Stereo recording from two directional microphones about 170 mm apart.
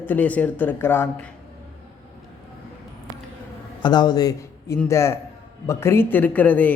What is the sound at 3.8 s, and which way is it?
A man's voice, 25° left (ahead or behind).